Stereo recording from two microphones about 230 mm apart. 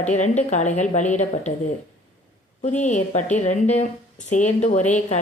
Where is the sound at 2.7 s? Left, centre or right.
Left.